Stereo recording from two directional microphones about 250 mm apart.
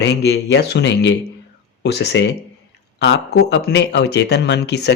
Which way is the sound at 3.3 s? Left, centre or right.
Left.